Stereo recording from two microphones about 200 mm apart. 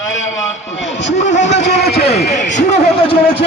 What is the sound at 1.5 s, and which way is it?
Speech, 60° left (ahead or behind).